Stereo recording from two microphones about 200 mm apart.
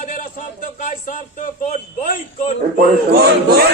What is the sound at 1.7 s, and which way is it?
Speech, 40° left (ahead or behind).